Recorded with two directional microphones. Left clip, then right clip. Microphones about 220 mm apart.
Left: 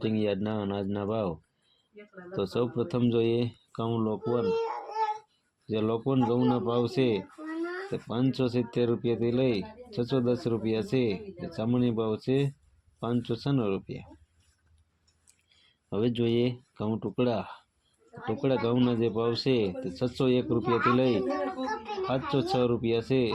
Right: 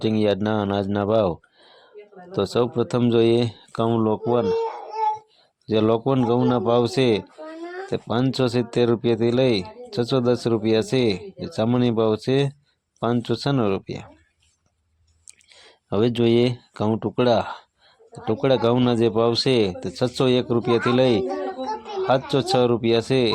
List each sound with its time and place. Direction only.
0.0 s speech: 25° right (ahead or behind)
5.6 s speech: 30° right (ahead or behind)
15.3 s speech: 30° right (ahead or behind)